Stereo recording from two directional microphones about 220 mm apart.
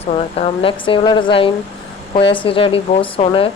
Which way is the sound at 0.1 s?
25° left (ahead or behind).